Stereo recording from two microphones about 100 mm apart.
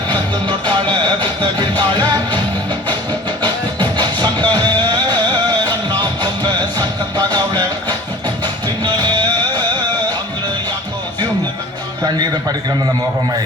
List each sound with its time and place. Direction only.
0.1 s music: 50° right (ahead or behind)
12.0 s music: 40° right (ahead or behind)